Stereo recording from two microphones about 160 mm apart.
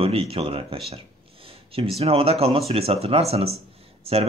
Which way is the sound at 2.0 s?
40° right (ahead or behind).